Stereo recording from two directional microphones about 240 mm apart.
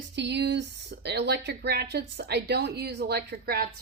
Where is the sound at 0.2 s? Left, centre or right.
Right.